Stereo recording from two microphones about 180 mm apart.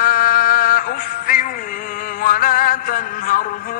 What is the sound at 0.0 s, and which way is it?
Music, 50° left (ahead or behind).